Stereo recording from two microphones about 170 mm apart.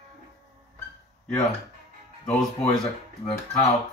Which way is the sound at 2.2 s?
Centre (ahead or behind).